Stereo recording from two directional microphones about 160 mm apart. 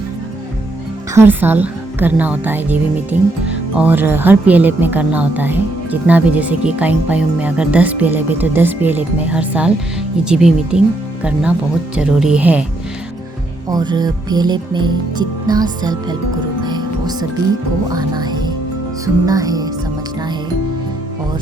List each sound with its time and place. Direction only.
1.1 s a woman's voice: 15° right (ahead or behind)
13.7 s music: 25° right (ahead or behind)